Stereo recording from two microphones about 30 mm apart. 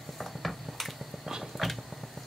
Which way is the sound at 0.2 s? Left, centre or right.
Centre.